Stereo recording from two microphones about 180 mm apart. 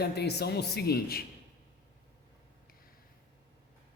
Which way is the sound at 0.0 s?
65° left (ahead or behind).